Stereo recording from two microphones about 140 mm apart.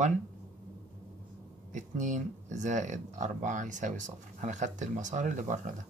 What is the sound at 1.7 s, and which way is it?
Speech, 60° right (ahead or behind).